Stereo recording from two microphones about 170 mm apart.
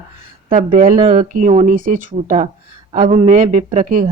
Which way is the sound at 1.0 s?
35° right (ahead or behind).